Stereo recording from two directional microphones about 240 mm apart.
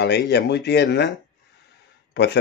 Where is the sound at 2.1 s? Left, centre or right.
Left.